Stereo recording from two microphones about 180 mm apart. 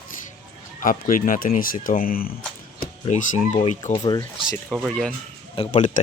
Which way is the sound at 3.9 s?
25° left (ahead or behind).